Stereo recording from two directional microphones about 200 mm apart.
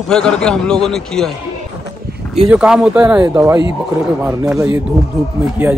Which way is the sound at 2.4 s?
5° right (ahead or behind).